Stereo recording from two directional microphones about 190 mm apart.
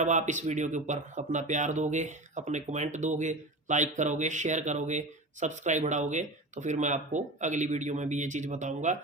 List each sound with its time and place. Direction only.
0.0 s speech: 40° right (ahead or behind)